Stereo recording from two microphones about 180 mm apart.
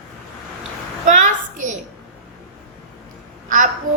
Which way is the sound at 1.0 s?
45° right (ahead or behind).